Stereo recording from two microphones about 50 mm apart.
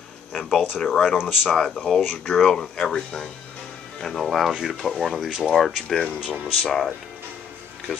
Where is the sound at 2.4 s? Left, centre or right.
Centre.